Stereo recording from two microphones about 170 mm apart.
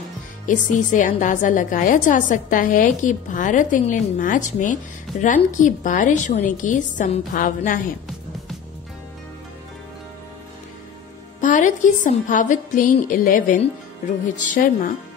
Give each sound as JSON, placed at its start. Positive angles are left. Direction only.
{"t": 0.5, "sound": "a woman's voice", "side_deg": 50}
{"t": 11.4, "sound": "a woman's voice", "side_deg": 50}